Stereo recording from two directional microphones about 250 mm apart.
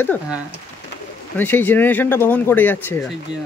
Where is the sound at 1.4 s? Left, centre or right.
Centre.